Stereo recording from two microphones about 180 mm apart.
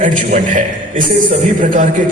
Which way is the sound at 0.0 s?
45° right (ahead or behind).